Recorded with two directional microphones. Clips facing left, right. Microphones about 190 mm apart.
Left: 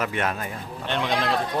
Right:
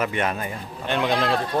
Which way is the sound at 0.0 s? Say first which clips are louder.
Right 2 dB; centre (ahead or behind).